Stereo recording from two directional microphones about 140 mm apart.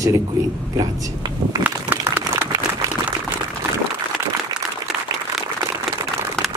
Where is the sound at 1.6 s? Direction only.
10° right (ahead or behind).